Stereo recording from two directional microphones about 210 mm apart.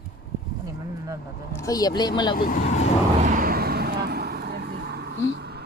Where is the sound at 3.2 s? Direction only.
40° right (ahead or behind).